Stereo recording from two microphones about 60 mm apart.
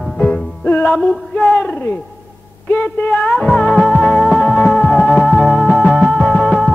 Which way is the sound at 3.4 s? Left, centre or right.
Centre.